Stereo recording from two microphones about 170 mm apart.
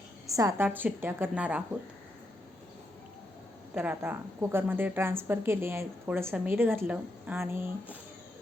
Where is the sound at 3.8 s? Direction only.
10° right (ahead or behind).